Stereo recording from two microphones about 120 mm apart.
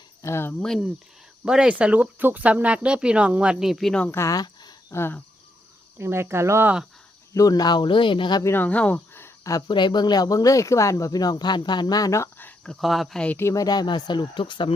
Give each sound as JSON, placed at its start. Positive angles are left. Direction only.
{"t": 0.2, "sound": "speech", "side_deg": 20}
{"t": 0.6, "sound": "speech", "side_deg": 5}
{"t": 1.5, "sound": "speech", "side_deg": -10}
{"t": 4.1, "sound": "a sound", "side_deg": 25}
{"t": 4.9, "sound": "cricket", "side_deg": 20}
{"t": 6.0, "sound": "speech", "side_deg": -20}
{"t": 7.3, "sound": "speech", "side_deg": 30}
{"t": 8.4, "sound": "speech", "side_deg": 15}
{"t": 9.5, "sound": "speech", "side_deg": 35}
{"t": 12.8, "sound": "speech", "side_deg": 0}
{"t": 13.4, "sound": "speech", "side_deg": 30}